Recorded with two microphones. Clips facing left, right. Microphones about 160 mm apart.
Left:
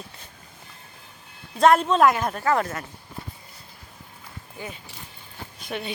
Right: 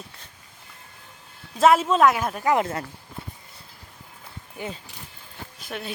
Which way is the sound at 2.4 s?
20° right (ahead or behind).